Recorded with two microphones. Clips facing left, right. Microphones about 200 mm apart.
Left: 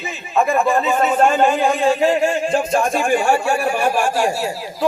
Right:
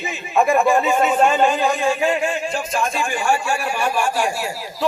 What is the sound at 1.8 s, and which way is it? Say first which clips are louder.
Speech: left 4 dB; 35° left (ahead or behind).